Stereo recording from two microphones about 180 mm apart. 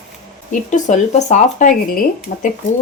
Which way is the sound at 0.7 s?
40° left (ahead or behind).